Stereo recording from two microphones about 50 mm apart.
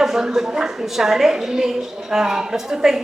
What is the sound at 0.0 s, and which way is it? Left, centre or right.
A woman's voice, centre.